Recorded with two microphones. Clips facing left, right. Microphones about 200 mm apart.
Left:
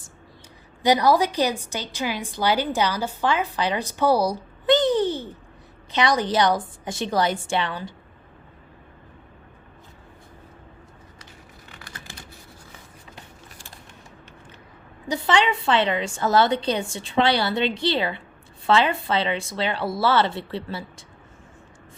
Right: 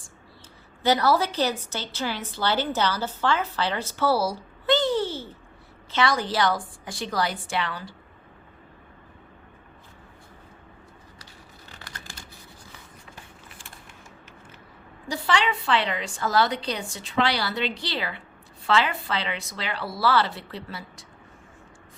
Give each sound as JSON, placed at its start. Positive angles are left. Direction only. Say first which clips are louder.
{"t": 0.8, "sound": "a woman's voice", "louder": "left 3 dB", "side_deg": 15}
{"t": 15.0, "sound": "a woman's voice", "louder": "left 4 dB", "side_deg": 20}